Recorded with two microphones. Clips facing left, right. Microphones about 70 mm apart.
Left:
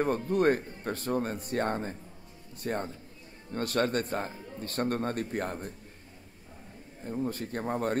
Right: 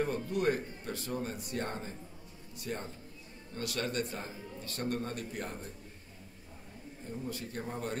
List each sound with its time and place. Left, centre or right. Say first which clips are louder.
0.0 s speech: left 5 dB; left
7.1 s speech: left 8 dB; left